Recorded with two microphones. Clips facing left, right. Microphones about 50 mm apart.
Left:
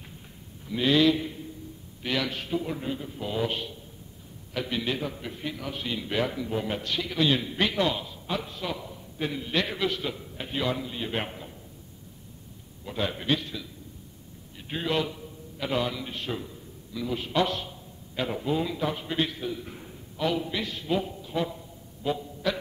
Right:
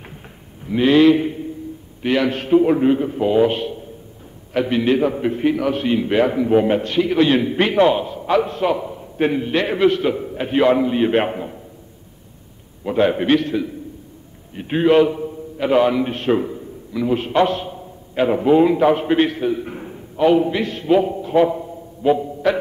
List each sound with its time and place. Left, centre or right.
0.7 s a sound: right
2.0 s a man's voice: right
12.8 s a man's voice: right